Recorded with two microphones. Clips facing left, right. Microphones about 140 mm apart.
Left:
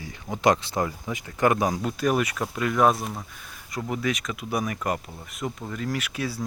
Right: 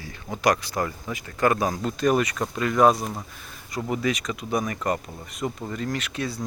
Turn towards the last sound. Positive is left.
turn(degrees=5)  # may be behind; listen again after turning